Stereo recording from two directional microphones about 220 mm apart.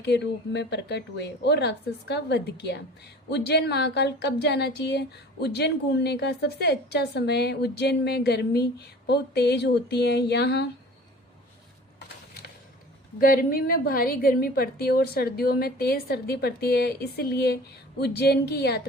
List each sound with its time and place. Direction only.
0.0 s speech: 50° left (ahead or behind)
13.1 s speech: 40° left (ahead or behind)